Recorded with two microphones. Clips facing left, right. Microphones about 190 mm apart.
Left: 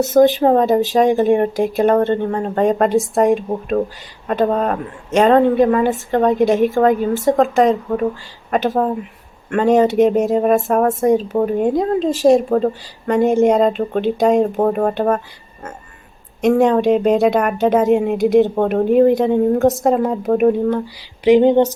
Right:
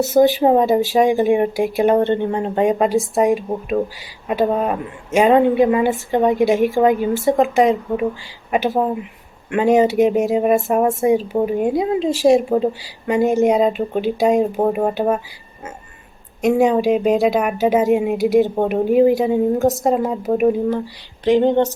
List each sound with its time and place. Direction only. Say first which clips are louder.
0.0 s a woman's voice: left 1 dB; centre (ahead or behind); by 2.6 s 20° right (ahead or behind)
2.6 s a woman's voice: left 3 dB; centre (ahead or behind)
16.4 s a woman's voice: left 2 dB; centre (ahead or behind)
21.2 s speech: left 3 dB; 15° left (ahead or behind)